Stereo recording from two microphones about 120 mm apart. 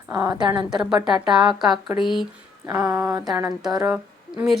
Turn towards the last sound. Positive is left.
turn(degrees=-5)  # may be behind; listen again after turning